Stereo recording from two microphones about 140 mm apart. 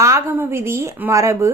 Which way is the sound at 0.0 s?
20° right (ahead or behind).